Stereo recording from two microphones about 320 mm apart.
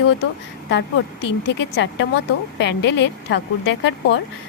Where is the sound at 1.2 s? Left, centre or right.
Left.